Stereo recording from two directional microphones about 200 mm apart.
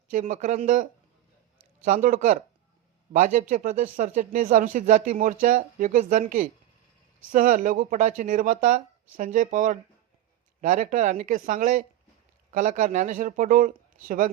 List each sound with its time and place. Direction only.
0.1 s speech: 40° right (ahead or behind)